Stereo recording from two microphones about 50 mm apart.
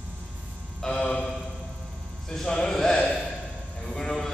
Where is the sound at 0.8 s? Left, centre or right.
Centre.